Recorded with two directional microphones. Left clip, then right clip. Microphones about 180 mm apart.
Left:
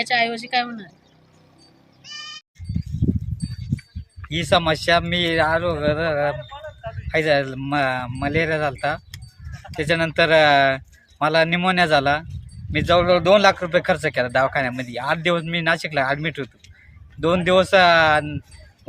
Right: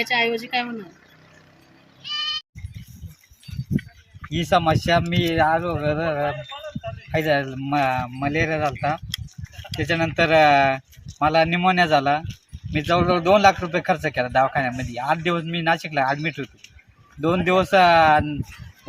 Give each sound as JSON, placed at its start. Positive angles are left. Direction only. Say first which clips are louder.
{"t": 0.1, "sound": "a man's voice", "louder": "left 4 dB", "side_deg": 25}
{"t": 4.3, "sound": "a man's voice", "louder": "left 1 dB", "side_deg": 20}